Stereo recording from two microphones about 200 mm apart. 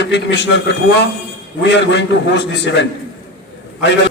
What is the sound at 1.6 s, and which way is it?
A man's voice, 60° left (ahead or behind).